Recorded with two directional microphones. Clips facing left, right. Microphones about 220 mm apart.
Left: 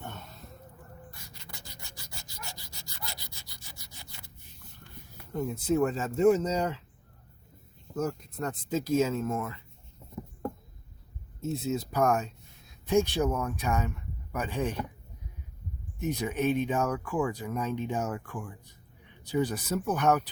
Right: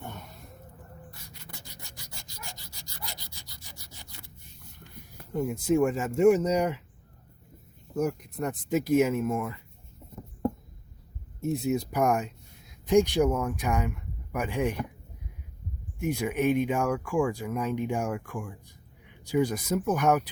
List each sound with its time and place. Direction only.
0.1 s a sound: 15° right (ahead or behind)
5.3 s speech: 15° right (ahead or behind)
7.9 s speech: 15° right (ahead or behind)
11.3 s speech: 15° right (ahead or behind)
16.0 s speech: 10° right (ahead or behind)